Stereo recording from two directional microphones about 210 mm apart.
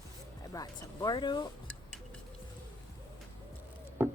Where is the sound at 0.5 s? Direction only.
20° left (ahead or behind).